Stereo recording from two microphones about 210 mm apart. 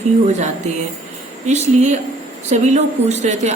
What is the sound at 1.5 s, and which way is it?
A woman's voice, 35° right (ahead or behind).